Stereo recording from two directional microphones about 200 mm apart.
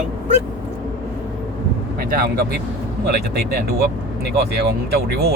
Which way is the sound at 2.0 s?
50° right (ahead or behind).